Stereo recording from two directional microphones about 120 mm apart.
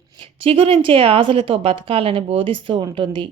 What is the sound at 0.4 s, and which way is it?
A woman's voice, 55° right (ahead or behind).